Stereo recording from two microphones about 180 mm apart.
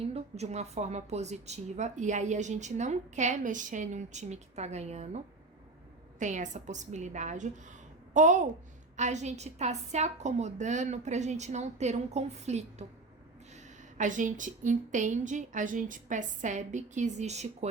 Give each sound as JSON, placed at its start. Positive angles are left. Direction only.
{"t": 0.0, "sound": "a woman's voice", "side_deg": -35}
{"t": 14.0, "sound": "a woman's voice", "side_deg": -45}